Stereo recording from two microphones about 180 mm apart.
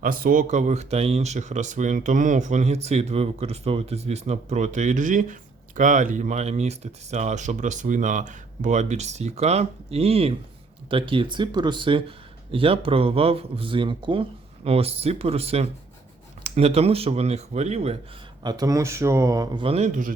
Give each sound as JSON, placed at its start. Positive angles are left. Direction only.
{"t": 0.0, "sound": "speech", "side_deg": -55}
{"t": 18.4, "sound": "speech", "side_deg": -20}
{"t": 19.6, "sound": "speech", "side_deg": -35}